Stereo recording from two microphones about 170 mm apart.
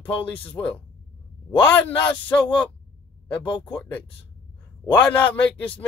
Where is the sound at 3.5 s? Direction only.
30° left (ahead or behind).